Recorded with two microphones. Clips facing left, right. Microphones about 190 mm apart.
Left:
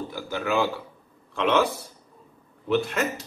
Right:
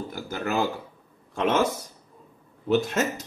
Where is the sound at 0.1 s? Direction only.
40° right (ahead or behind).